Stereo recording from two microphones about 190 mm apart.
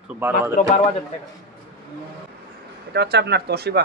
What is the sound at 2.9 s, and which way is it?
Speech, 60° right (ahead or behind).